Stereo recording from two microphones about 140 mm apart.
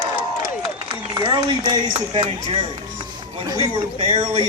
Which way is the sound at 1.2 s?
30° right (ahead or behind).